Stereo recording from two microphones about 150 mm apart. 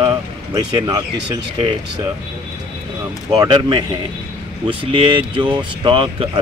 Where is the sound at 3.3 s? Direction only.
30° right (ahead or behind).